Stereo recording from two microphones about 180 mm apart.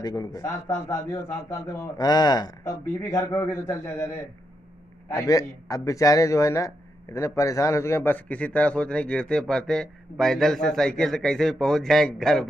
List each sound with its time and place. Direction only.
0.0 s a man's voice: 20° left (ahead or behind); by 12.4 s centre (ahead or behind)